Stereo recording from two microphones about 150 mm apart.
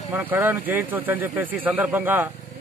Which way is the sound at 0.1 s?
10° right (ahead or behind).